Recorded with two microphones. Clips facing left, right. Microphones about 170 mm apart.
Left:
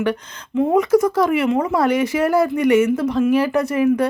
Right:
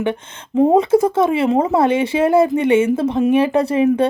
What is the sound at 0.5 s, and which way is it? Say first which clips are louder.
Speech: right 3 dB; 35° right (ahead or behind).